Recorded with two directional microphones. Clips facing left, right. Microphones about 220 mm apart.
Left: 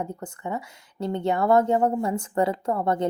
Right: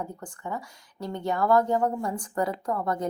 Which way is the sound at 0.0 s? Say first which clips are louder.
Left 4 dB; 25° left (ahead or behind).